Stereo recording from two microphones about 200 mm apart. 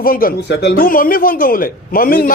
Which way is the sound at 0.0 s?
45° left (ahead or behind).